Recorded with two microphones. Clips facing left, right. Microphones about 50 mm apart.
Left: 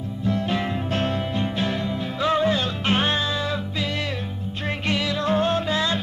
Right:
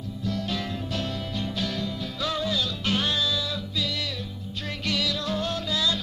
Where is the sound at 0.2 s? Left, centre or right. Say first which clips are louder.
Left 6 dB; left.